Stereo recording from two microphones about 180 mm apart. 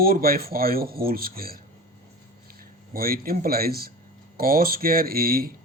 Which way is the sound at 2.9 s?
55° right (ahead or behind).